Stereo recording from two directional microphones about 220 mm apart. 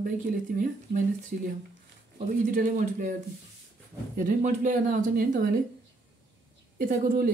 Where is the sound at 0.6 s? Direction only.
40° right (ahead or behind).